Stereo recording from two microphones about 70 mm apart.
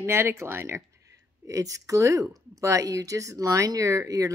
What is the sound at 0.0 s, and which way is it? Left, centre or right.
Speech, right.